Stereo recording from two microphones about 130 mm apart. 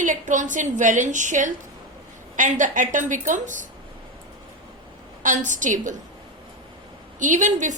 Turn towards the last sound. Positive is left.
turn(degrees=-70)  # may be behind; listen again after turning